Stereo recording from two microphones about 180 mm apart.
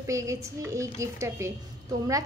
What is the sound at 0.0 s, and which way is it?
A woman's voice, 15° right (ahead or behind).